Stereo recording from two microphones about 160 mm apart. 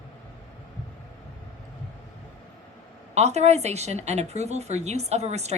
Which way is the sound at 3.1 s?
45° right (ahead or behind).